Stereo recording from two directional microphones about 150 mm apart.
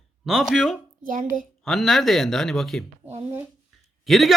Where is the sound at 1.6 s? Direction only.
Centre (ahead or behind).